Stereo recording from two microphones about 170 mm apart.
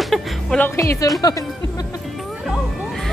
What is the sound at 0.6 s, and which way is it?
Speech, 20° left (ahead or behind).